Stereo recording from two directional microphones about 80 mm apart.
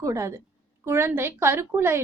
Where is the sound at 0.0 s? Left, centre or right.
Right.